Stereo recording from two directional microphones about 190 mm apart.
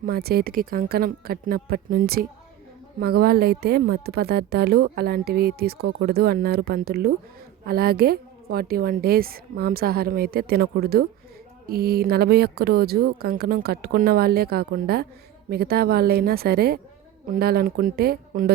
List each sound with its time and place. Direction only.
0.0 s a woman's voice: 55° right (ahead or behind)